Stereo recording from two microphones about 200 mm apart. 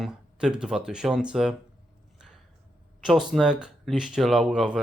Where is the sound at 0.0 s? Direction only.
5° right (ahead or behind).